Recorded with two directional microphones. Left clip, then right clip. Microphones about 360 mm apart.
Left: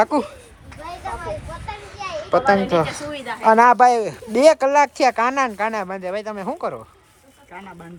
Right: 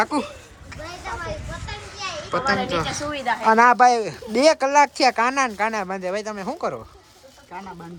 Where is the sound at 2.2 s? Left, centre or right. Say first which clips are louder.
Left 6 dB; centre.